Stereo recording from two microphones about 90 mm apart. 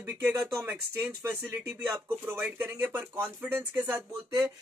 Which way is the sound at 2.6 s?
20° right (ahead or behind).